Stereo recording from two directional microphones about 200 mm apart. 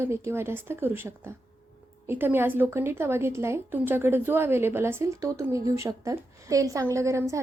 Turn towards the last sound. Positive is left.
turn(degrees=-15)  # may be behind; listen again after turning